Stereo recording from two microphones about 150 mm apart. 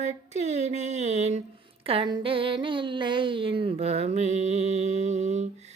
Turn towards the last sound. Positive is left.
turn(degrees=-50)  # may be behind; listen again after turning